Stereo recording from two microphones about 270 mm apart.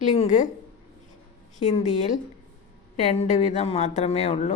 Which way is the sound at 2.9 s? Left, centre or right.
Left.